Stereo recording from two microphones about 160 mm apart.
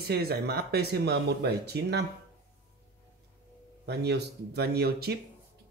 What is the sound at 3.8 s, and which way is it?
Speech, 90° right.